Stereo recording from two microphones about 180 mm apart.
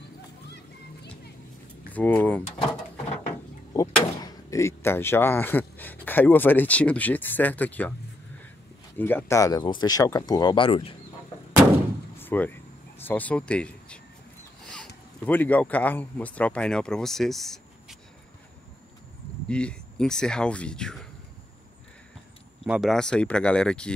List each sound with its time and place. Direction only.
2.0 s speech: 10° left (ahead or behind)
3.7 s speech: 20° left (ahead or behind)
8.9 s speech: 10° left (ahead or behind); by 11.0 s 30° left (ahead or behind)
12.2 s vehicle: 10° left (ahead or behind)
13.0 s speech: 10° left (ahead or behind)
15.2 s speech: 10° left (ahead or behind)
19.5 s speech: 5° left (ahead or behind)
22.7 s speech: centre (ahead or behind)